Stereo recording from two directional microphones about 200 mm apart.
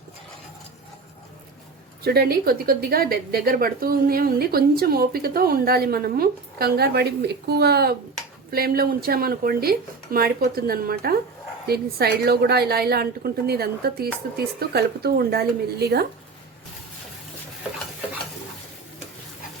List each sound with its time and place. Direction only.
2.0 s a woman's voice: 50° right (ahead or behind)